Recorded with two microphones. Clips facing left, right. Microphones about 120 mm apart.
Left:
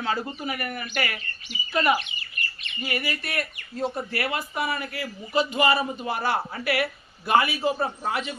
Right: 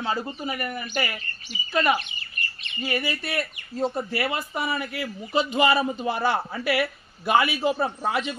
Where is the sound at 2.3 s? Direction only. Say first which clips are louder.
Right 1 dB; 30° right (ahead or behind).